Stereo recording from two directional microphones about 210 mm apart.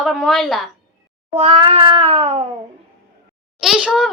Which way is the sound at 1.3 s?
30° right (ahead or behind).